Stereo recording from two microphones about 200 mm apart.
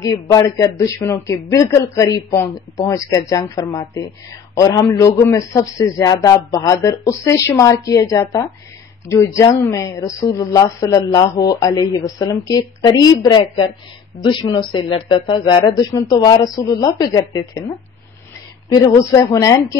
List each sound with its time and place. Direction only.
0.0 s a man's voice: 15° left (ahead or behind)